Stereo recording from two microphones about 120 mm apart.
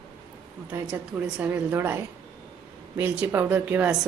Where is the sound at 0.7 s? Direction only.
15° right (ahead or behind).